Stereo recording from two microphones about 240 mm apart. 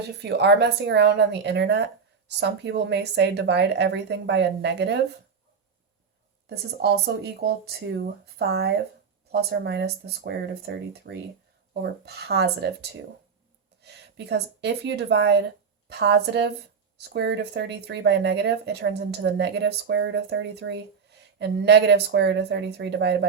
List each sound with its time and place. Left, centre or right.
0.2 s speech: right
6.5 s speech: right